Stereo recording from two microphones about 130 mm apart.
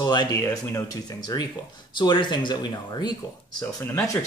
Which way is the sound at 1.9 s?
35° left (ahead or behind).